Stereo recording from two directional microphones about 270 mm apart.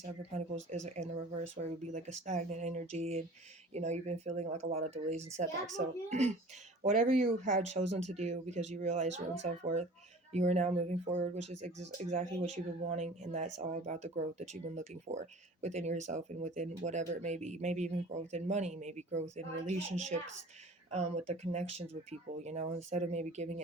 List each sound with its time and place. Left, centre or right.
0.0 s speech: right